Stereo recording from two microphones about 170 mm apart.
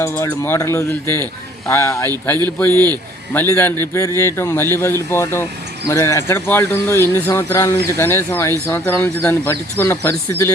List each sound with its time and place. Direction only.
0.0 s speech: 15° left (ahead or behind)